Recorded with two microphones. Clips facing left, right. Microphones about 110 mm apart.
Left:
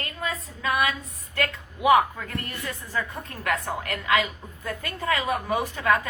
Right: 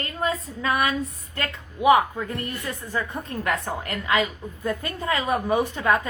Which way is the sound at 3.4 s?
30° right (ahead or behind).